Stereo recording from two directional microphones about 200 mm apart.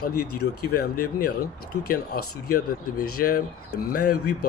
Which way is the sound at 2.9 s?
90° left.